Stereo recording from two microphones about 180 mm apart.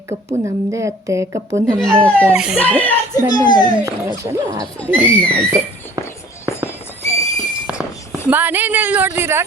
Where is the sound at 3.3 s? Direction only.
25° left (ahead or behind).